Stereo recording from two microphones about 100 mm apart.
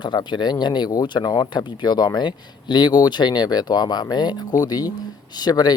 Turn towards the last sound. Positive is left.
turn(degrees=45)  # may be behind; listen again after turning